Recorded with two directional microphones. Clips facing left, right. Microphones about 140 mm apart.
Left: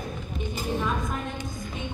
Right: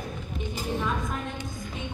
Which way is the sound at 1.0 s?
40° left (ahead or behind).